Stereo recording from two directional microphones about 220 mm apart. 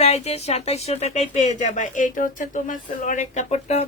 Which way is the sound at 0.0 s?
30° left (ahead or behind).